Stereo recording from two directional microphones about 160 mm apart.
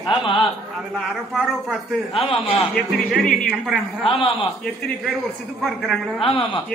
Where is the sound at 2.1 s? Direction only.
35° left (ahead or behind).